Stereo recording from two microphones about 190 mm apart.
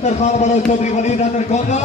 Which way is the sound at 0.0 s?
35° left (ahead or behind).